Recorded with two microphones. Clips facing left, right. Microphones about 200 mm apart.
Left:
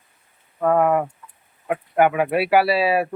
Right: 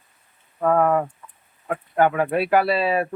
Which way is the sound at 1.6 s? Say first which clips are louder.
Left 2 dB; 15° left (ahead or behind).